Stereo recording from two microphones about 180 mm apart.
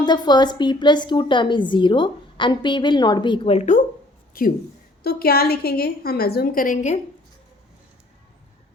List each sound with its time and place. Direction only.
0.0 s a woman's voice: 25° left (ahead or behind)
4.4 s a woman's voice: 55° left (ahead or behind)